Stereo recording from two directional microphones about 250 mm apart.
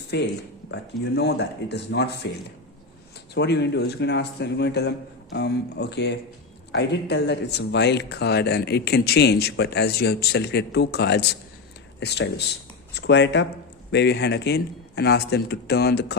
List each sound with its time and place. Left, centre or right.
0.1 s a man's voice: left
3.3 s a man's voice: left